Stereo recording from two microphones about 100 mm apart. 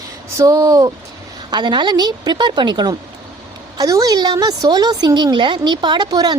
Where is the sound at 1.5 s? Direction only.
50° right (ahead or behind).